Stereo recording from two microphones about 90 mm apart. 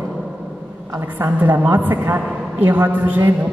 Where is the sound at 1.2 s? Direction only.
20° right (ahead or behind).